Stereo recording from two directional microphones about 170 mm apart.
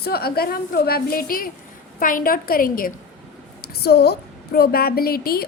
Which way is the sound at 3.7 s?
65° left (ahead or behind).